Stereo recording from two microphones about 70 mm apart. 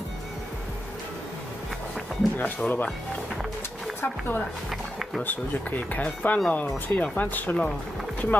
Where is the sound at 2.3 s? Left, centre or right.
Left.